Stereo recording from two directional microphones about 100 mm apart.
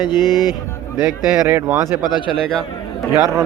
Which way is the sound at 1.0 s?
15° right (ahead or behind).